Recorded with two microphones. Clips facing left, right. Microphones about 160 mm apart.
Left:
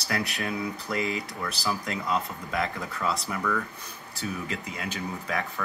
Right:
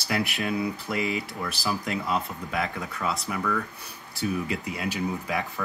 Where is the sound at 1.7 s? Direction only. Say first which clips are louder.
Right 1 dB; 15° right (ahead or behind).